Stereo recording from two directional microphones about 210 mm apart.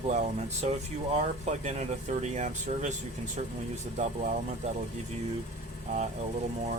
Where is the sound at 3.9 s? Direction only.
35° right (ahead or behind).